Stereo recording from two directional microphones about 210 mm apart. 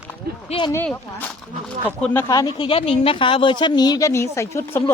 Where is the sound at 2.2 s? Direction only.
20° left (ahead or behind).